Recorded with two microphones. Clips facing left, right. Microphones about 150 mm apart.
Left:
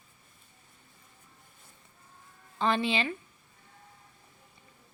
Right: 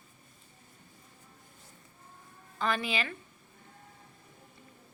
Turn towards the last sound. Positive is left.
turn(degrees=25)  # may be behind; listen again after turning